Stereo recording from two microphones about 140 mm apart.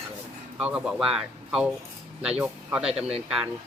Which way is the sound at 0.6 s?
10° right (ahead or behind).